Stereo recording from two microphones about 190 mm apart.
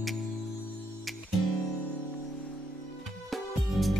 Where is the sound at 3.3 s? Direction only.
Centre (ahead or behind).